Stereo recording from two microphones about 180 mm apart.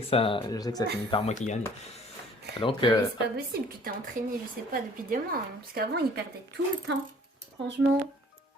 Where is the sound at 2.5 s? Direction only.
25° left (ahead or behind).